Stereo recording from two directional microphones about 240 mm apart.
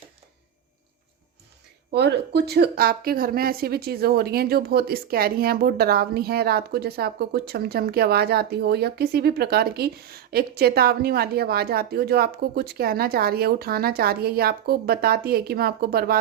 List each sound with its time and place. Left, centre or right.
1.9 s a woman's voice: right